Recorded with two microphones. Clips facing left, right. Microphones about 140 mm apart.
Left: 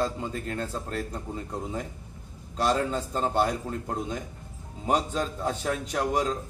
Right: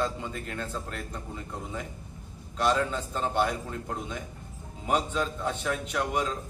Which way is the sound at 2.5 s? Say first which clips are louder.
Left 1 dB; 35° left (ahead or behind).